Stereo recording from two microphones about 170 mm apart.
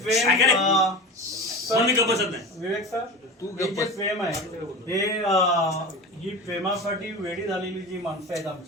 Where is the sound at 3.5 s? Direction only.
20° left (ahead or behind).